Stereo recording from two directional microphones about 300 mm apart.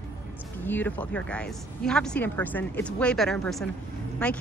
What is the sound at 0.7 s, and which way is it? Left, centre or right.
A woman's voice, centre.